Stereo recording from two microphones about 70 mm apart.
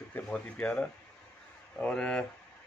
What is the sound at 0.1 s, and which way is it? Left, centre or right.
A man's voice, centre.